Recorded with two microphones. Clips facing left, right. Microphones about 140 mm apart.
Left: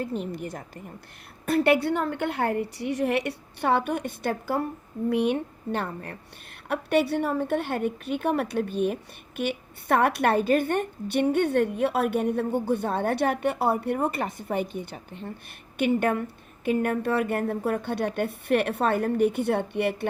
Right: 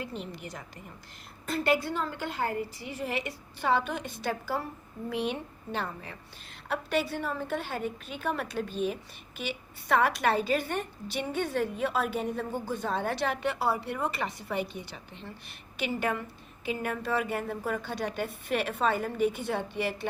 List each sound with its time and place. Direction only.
0.0 s a woman's voice: 45° left (ahead or behind)
1.5 s a woman's voice: 65° left (ahead or behind)